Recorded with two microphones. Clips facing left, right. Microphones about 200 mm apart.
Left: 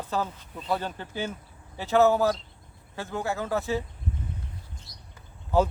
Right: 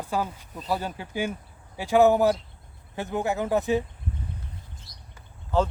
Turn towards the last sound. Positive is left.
turn(degrees=10)  # may be behind; listen again after turning